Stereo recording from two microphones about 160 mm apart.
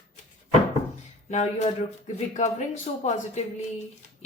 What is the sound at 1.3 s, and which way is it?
A woman's voice, 45° left (ahead or behind).